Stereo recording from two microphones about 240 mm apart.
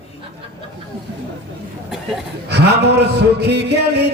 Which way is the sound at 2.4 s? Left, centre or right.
Right.